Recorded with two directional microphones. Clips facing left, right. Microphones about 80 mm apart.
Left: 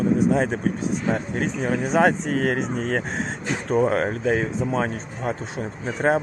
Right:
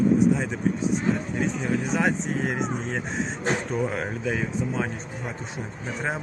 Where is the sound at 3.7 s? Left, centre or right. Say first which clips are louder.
Left 7 dB; left.